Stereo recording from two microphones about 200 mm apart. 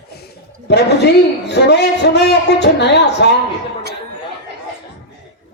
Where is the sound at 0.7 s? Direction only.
55° left (ahead or behind).